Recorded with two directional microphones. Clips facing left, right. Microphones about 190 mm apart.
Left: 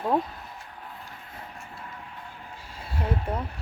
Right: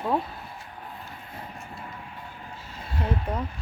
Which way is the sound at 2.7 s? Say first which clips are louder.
Right 1 dB; 10° left (ahead or behind).